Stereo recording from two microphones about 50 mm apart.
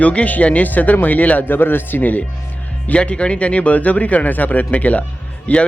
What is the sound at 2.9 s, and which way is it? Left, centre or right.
Speech, left.